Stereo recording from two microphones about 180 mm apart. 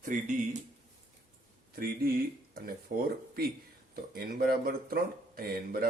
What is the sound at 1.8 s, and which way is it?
Speech, 55° right (ahead or behind).